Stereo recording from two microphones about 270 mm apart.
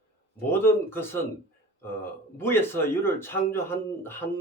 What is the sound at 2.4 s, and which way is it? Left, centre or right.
Speech, centre.